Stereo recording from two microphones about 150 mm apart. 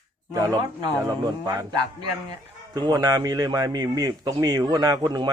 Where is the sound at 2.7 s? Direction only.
25° right (ahead or behind).